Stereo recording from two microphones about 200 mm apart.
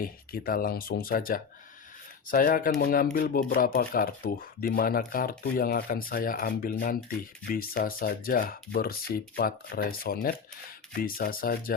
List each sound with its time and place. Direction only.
0.0 s speech: 45° left (ahead or behind)